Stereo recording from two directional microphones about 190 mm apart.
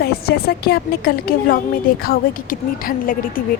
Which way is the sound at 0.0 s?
55° left (ahead or behind).